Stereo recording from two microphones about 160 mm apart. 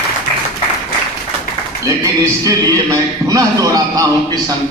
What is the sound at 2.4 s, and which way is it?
Speech, 20° right (ahead or behind).